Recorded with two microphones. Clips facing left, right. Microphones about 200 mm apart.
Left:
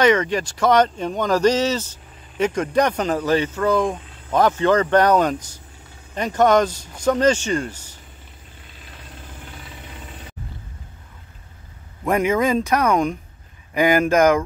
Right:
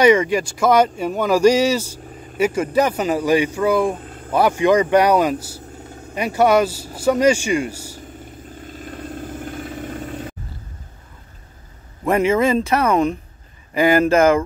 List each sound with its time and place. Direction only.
0.0 s speech: 10° right (ahead or behind)
4.0 s vehicle: 50° right (ahead or behind)
4.3 s speech: 10° right (ahead or behind)
8.5 s vehicle: 45° right (ahead or behind)
12.0 s speech: 5° right (ahead or behind)